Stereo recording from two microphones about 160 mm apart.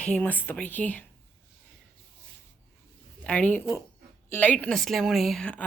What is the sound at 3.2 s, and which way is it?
A woman's voice, 10° left (ahead or behind).